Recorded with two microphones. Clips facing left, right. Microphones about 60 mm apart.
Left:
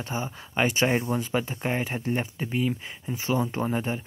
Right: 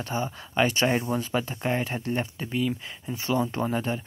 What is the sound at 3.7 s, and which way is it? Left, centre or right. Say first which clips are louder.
Speech: even; centre.